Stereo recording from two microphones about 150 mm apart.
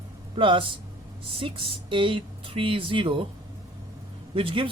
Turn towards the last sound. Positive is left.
turn(degrees=-35)  # may be behind; listen again after turning